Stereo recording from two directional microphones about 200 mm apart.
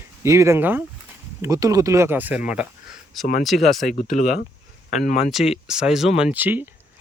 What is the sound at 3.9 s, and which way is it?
Speech, 40° left (ahead or behind).